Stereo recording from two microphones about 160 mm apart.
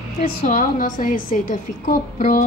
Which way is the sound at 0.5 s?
55° left (ahead or behind).